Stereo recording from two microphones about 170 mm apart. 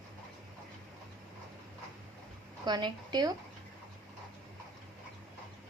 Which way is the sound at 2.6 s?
25° right (ahead or behind).